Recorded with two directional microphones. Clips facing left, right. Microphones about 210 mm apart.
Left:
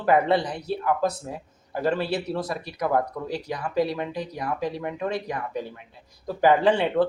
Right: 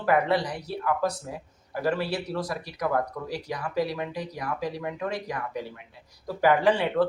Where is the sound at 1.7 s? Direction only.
25° left (ahead or behind).